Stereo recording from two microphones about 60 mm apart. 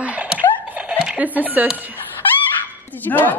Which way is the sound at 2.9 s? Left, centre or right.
Left.